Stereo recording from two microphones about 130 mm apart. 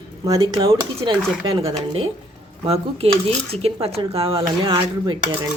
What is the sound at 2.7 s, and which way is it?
Speech, 50° right (ahead or behind).